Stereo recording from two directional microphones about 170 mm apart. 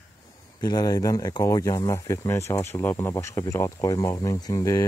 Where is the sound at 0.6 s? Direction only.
25° left (ahead or behind).